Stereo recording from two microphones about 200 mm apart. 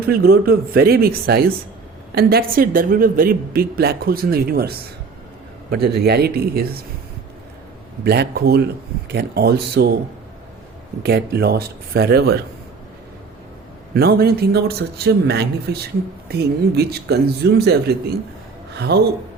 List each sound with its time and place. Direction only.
0.1 s a woman's voice: 50° right (ahead or behind)
8.0 s a man's voice: 55° right (ahead or behind)
11.0 s a woman's voice: 55° right (ahead or behind)
13.9 s a woman's voice: 50° right (ahead or behind)